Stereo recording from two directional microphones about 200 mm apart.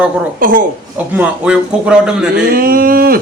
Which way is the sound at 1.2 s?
5° right (ahead or behind).